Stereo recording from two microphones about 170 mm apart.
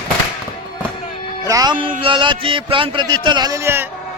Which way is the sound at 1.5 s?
20° right (ahead or behind).